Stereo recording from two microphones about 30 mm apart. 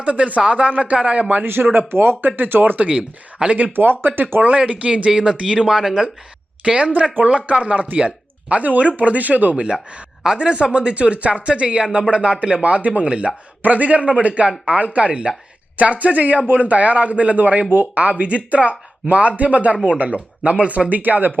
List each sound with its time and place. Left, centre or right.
0.0 s a man's voice: right
2.2 s speech: right
3.4 s speech: right
4.2 s speech: right
4.5 s speech: right; by 5.9 s centre
6.7 s a man's voice: right
10.3 s speech: right
12.6 s a man's voice: right
13.6 s a man's voice: right
15.8 s a man's voice: right
17.6 s a man's voice: right
20.9 s speech: right